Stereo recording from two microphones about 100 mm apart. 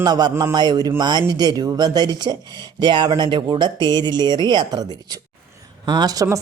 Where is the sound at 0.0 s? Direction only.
40° right (ahead or behind).